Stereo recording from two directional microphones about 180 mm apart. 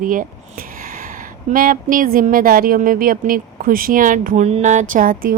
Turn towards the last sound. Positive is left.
turn(degrees=-50)  # may be behind; listen again after turning